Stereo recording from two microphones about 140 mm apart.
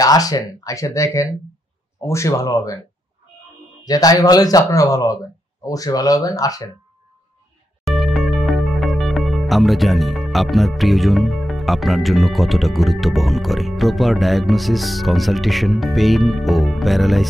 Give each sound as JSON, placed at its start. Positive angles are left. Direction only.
{"t": 0.0, "sound": "speech", "side_deg": 25}
{"t": 3.8, "sound": "speech", "side_deg": 25}
{"t": 7.8, "sound": "music", "side_deg": 0}